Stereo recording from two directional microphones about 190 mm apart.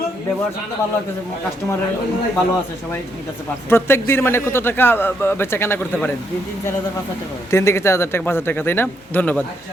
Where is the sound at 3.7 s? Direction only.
10° left (ahead or behind).